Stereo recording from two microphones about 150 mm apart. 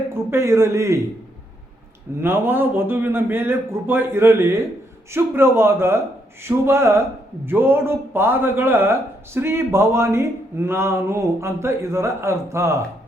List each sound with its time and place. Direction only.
0.1 s a man's voice: 15° right (ahead or behind)
2.2 s speech: 15° right (ahead or behind)